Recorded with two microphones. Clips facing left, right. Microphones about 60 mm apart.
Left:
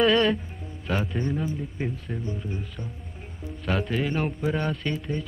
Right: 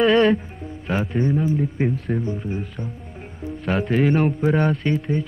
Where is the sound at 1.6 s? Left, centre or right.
Right.